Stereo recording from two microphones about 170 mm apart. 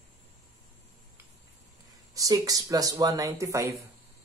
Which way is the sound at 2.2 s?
20° right (ahead or behind).